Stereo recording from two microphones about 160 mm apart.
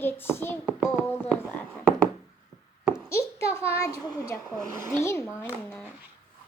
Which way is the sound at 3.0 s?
15° left (ahead or behind).